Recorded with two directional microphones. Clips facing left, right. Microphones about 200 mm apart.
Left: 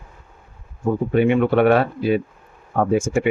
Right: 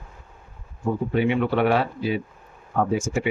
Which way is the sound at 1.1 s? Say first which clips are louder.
Left 6 dB; 50° left (ahead or behind).